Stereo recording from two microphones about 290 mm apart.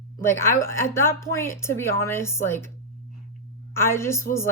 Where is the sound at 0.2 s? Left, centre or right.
Centre.